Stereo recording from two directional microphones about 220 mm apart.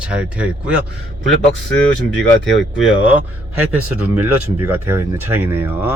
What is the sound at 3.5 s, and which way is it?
Speech, 80° right.